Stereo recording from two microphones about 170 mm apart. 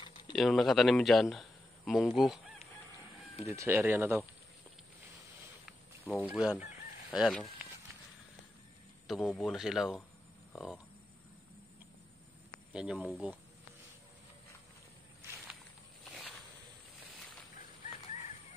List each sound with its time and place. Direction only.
0.0 s a sound: 30° left (ahead or behind)
0.4 s speech: centre (ahead or behind)
3.4 s speech: 15° right (ahead or behind)
5.7 s fowl: centre (ahead or behind)
9.0 s speech: centre (ahead or behind)
12.7 s speech: 5° right (ahead or behind)
16.0 s snake: centre (ahead or behind)